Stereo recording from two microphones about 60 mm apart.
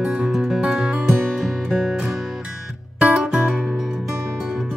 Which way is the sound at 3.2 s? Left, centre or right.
Centre.